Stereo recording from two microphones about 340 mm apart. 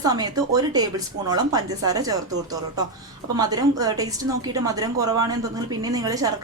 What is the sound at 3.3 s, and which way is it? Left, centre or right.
Speech, centre.